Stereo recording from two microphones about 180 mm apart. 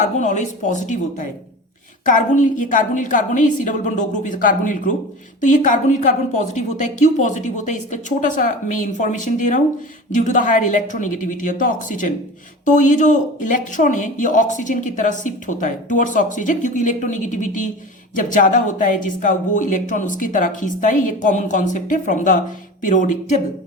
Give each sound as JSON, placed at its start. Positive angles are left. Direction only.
{"t": 0.0, "sound": "speech", "side_deg": 45}
{"t": 2.0, "sound": "speech", "side_deg": 45}